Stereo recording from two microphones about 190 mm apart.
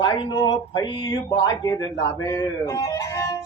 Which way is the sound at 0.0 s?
25° left (ahead or behind).